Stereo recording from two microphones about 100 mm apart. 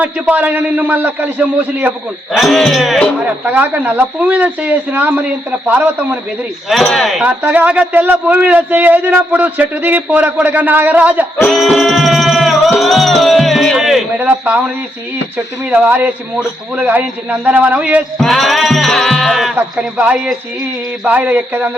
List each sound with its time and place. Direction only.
0.0 s speech: 15° right (ahead or behind)
2.3 s speech: centre (ahead or behind)
3.2 s speech: 15° right (ahead or behind)
6.7 s speech: centre (ahead or behind)
7.4 s speech: 15° right (ahead or behind)
11.4 s music: centre (ahead or behind)
12.8 s speech: centre (ahead or behind)
14.2 s speech: 15° right (ahead or behind)
15.6 s speech: 15° right (ahead or behind)
18.2 s speech: centre (ahead or behind)
20.0 s speech: 15° right (ahead or behind)